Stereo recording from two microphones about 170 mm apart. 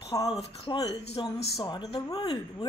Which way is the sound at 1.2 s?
30° left (ahead or behind).